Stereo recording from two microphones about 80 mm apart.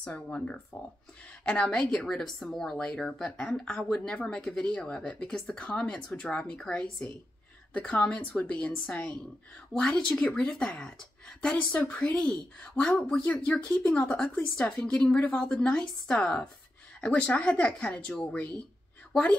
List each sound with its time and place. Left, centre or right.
0.0 s speech: centre